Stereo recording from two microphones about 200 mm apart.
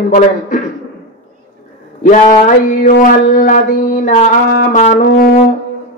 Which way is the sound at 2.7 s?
40° left (ahead or behind).